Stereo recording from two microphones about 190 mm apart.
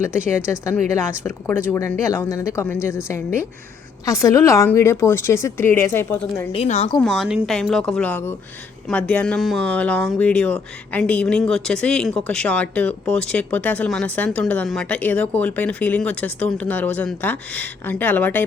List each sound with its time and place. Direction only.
0.1 s a woman's voice: 5° right (ahead or behind)
0.9 s speech: 10° left (ahead or behind)
6.5 s a woman's voice: 35° left (ahead or behind)
7.0 s speech: centre (ahead or behind)